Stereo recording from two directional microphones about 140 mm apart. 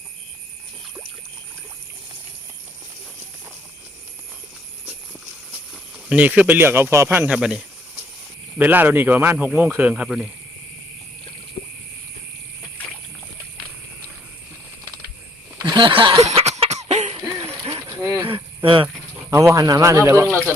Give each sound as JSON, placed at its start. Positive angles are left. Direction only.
{"t": 5.7, "sound": "speech", "side_deg": -10}
{"t": 7.3, "sound": "speech", "side_deg": -5}
{"t": 15.5, "sound": "a sound", "side_deg": -35}
{"t": 16.2, "sound": "cough", "side_deg": -50}
{"t": 17.2, "sound": "a sound", "side_deg": -25}
{"t": 18.6, "sound": "speech", "side_deg": -40}
{"t": 19.3, "sound": "speech", "side_deg": -20}